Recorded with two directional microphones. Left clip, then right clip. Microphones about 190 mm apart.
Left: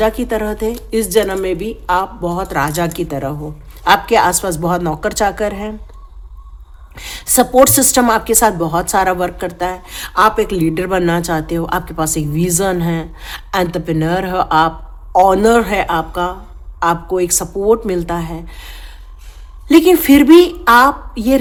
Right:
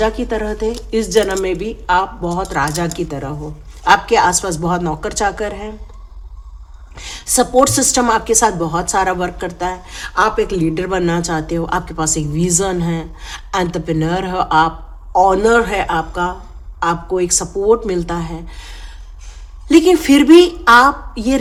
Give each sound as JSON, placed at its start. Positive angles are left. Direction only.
{"t": 0.0, "sound": "a woman's voice", "side_deg": 15}
{"t": 6.9, "sound": "a woman's voice", "side_deg": 20}